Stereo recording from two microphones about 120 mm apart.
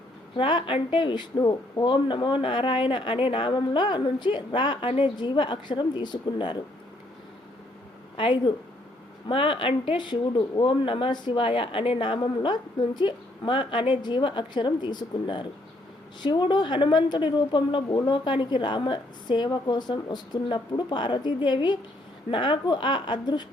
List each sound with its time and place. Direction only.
0.3 s speech: 45° left (ahead or behind)
8.1 s a woman's voice: 45° left (ahead or behind)